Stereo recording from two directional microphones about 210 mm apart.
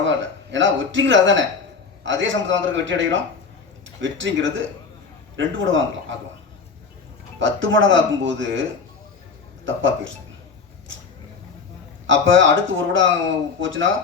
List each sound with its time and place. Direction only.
0.0 s speech: 60° right (ahead or behind)
7.3 s speech: 65° right (ahead or behind)
9.6 s speech: 65° right (ahead or behind)
12.0 s speech: 65° right (ahead or behind)